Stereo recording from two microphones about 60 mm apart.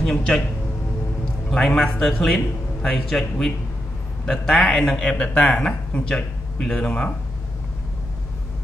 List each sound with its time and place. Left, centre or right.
0.0 s a man's voice: centre
1.2 s a sound: centre
1.8 s a man's voice: centre
5.1 s a man's voice: centre
6.9 s speech: left